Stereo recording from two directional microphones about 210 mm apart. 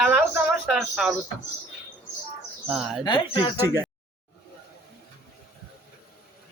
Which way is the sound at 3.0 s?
20° left (ahead or behind).